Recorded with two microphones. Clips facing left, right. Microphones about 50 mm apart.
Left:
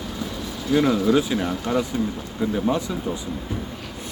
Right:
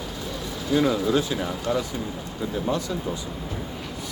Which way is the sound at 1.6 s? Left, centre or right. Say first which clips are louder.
Even; centre.